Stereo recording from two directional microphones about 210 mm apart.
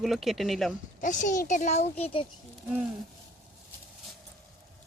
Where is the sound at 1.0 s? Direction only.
35° left (ahead or behind).